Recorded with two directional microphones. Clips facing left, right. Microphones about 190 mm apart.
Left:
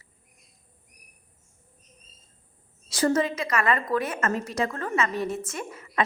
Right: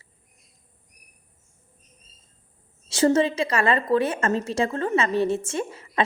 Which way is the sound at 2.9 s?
25° right (ahead or behind).